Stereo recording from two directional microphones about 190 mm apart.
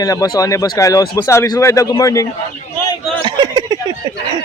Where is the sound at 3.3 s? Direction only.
20° right (ahead or behind).